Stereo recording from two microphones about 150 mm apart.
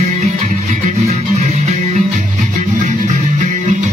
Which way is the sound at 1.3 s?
50° right (ahead or behind).